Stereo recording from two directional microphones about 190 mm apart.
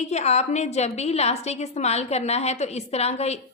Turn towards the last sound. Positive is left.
turn(degrees=35)  # may be behind; listen again after turning